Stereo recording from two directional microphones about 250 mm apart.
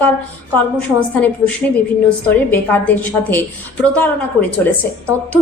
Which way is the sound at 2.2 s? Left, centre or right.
Centre.